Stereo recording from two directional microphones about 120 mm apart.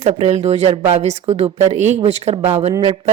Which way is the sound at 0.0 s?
60° right (ahead or behind).